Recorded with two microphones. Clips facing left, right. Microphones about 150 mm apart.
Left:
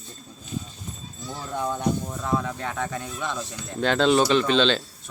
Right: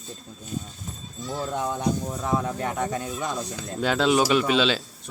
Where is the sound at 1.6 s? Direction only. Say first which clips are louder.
Left 3 dB; 15° right (ahead or behind).